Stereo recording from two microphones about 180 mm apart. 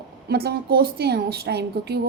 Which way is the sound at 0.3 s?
60° right (ahead or behind).